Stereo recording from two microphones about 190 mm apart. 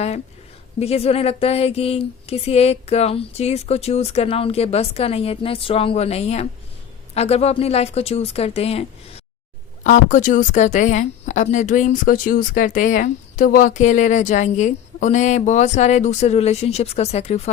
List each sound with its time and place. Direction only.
0.8 s a woman's voice: 35° left (ahead or behind)